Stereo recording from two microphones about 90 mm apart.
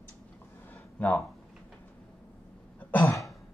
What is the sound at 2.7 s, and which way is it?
Throat clearing, 15° left (ahead or behind).